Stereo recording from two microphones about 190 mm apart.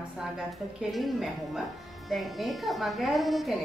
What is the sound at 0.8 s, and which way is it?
A woman's voice, centre (ahead or behind).